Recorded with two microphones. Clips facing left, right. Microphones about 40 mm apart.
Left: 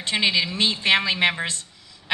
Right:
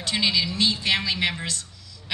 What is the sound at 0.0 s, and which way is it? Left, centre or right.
A woman's voice, left.